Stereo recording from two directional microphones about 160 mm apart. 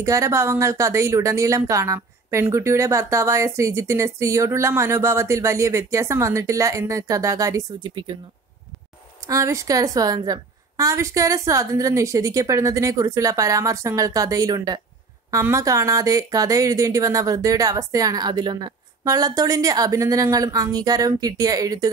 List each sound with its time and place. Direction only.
0.0 s speech: 20° right (ahead or behind)
9.3 s speech: 20° right (ahead or behind)